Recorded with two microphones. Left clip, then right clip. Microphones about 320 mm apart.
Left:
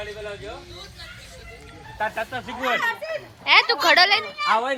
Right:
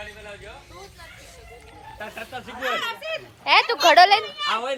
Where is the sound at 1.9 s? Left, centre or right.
Left.